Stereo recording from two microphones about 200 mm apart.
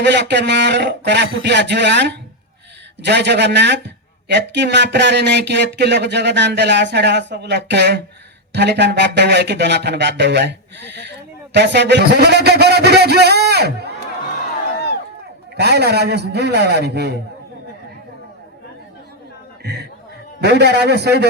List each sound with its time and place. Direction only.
0.0 s a man's voice: 60° right (ahead or behind)
15.5 s a man's voice: 55° right (ahead or behind)
19.6 s music: 55° right (ahead or behind)
20.4 s a man's voice: 55° right (ahead or behind)